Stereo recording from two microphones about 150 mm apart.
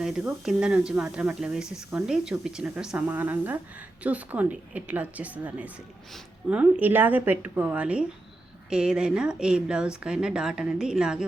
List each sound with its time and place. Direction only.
0.0 s a woman's voice: 5° right (ahead or behind)
6.1 s speech: centre (ahead or behind)
6.6 s a woman's voice: 10° right (ahead or behind)